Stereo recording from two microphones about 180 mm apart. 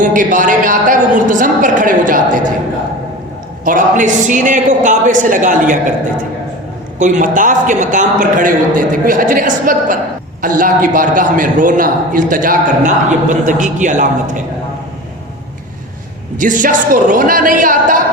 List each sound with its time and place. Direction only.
0.0 s a man's voice: 45° right (ahead or behind)
3.6 s a man's voice: 45° right (ahead or behind)
7.0 s a man's voice: 45° right (ahead or behind)
16.4 s a man's voice: 45° right (ahead or behind)